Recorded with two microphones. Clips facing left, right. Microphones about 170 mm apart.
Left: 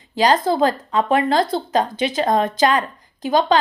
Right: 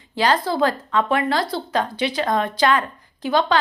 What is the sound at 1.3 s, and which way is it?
Speech, 50° left (ahead or behind).